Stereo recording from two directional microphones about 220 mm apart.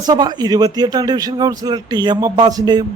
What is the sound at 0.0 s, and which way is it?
A man's voice, 20° right (ahead or behind).